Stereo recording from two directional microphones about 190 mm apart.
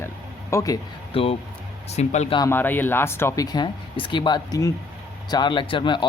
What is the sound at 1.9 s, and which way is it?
Speech, 35° left (ahead or behind).